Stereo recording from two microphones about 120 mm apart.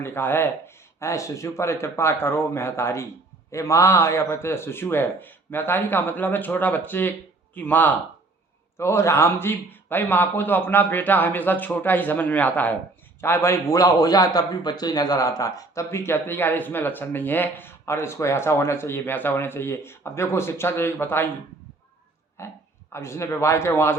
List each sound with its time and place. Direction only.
0.0 s a man's voice: 20° left (ahead or behind)
22.4 s a man's voice: 20° left (ahead or behind)